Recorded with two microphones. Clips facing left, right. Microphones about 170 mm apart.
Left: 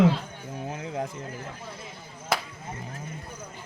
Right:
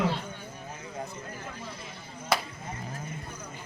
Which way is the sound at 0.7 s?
85° left.